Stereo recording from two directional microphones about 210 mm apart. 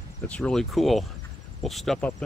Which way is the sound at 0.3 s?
5° left (ahead or behind).